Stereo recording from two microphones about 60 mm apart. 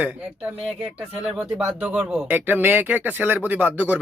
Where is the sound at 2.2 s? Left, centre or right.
Right.